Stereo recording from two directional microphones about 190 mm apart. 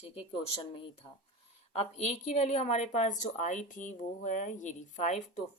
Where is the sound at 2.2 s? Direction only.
35° left (ahead or behind).